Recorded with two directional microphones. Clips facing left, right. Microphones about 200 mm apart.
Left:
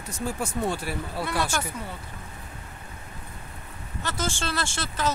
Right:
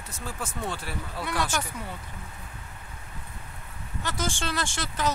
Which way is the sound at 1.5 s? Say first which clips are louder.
Left 1 dB; 15° right (ahead or behind).